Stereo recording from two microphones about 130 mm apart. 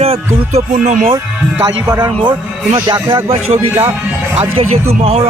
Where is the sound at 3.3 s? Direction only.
50° right (ahead or behind).